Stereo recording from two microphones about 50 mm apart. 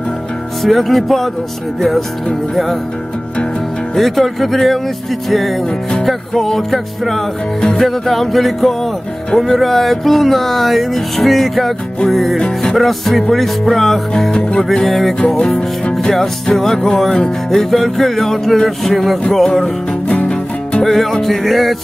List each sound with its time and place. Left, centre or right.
0.6 s music: centre
3.9 s music: centre
12.4 s music: centre
12.7 s music: centre
15.1 s music: left
20.1 s music: left
20.8 s music: centre